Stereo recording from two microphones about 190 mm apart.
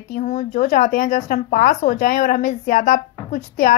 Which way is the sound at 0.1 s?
40° left (ahead or behind).